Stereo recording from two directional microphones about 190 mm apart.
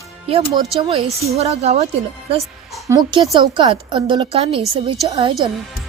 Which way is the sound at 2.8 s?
20° right (ahead or behind).